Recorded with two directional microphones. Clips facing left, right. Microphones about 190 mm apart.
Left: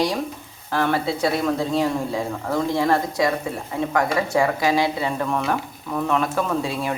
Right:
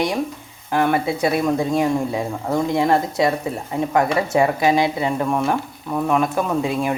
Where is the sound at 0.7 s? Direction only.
15° right (ahead or behind).